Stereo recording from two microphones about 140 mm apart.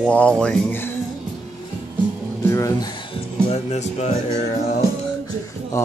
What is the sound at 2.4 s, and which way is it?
Speech, 20° left (ahead or behind).